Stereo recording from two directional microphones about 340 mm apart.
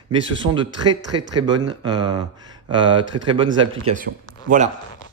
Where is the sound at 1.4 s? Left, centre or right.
Centre.